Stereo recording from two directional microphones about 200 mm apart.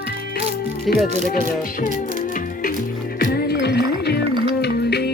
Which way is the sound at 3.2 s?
55° left (ahead or behind).